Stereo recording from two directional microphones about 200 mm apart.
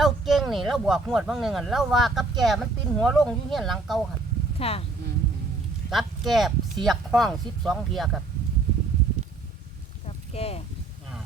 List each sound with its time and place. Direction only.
0.0 s speech: centre (ahead or behind)
4.5 s speech: 30° left (ahead or behind)
5.9 s speech: centre (ahead or behind)
10.3 s speech: 30° left (ahead or behind)